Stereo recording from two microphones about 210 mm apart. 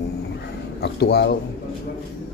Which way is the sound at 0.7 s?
50° left (ahead or behind).